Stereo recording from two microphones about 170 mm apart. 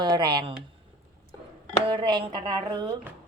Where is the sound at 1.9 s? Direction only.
30° right (ahead or behind).